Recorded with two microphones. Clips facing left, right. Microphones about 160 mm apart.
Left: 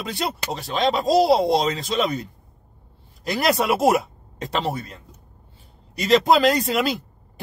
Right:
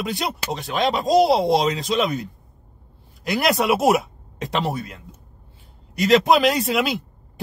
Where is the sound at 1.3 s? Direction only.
Centre (ahead or behind).